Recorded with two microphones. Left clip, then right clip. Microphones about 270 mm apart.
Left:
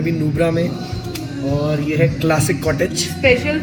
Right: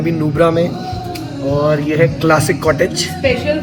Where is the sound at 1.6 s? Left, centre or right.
Centre.